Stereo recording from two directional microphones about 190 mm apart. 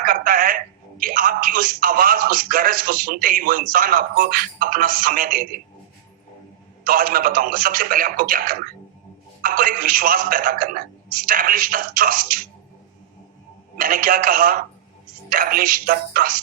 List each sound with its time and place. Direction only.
0.0 s speech: 50° right (ahead or behind)
6.8 s speech: 50° right (ahead or behind)
13.7 s speech: 50° right (ahead or behind)